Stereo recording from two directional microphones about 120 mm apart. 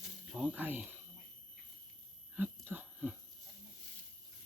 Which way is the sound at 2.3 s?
15° right (ahead or behind).